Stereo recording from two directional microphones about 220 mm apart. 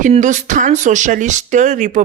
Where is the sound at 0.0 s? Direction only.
35° right (ahead or behind).